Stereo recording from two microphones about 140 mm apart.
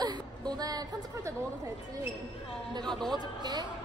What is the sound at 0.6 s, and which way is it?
Speech, 25° right (ahead or behind).